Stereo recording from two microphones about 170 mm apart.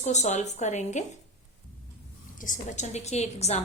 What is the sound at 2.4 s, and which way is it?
A woman's voice, 45° left (ahead or behind).